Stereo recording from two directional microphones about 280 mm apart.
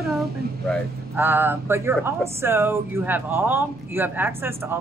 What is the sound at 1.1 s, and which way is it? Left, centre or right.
Speech, centre.